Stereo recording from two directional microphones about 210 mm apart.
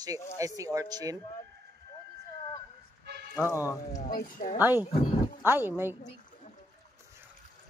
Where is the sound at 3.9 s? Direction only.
40° left (ahead or behind).